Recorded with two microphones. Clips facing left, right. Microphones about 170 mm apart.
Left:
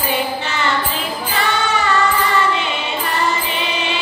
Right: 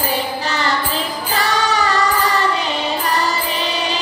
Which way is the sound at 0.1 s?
35° right (ahead or behind).